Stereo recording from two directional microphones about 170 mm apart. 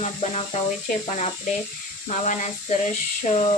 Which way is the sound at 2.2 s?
45° left (ahead or behind).